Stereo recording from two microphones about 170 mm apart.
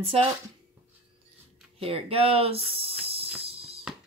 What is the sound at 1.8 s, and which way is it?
Speech, 35° right (ahead or behind).